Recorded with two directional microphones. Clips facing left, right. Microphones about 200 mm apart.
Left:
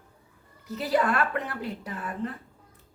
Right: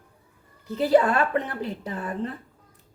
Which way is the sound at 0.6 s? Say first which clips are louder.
Right 6 dB; 30° right (ahead or behind).